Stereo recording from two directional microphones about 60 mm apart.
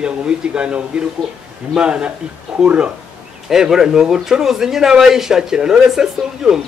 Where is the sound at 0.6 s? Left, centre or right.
Centre.